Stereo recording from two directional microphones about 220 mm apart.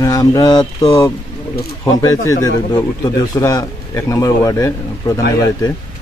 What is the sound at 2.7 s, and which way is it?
A man's voice, 15° left (ahead or behind).